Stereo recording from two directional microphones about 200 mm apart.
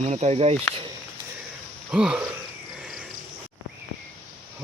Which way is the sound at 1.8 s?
5° right (ahead or behind).